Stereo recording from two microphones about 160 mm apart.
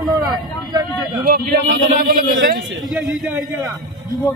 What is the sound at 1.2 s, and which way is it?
A man's voice, 65° right (ahead or behind).